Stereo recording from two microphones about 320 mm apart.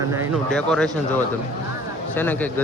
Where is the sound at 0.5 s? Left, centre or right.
Centre.